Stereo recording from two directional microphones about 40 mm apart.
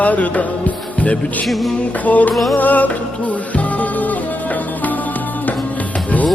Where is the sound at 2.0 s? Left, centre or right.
Left.